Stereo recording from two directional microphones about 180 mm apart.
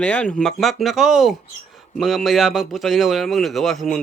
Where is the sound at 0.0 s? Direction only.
5° left (ahead or behind).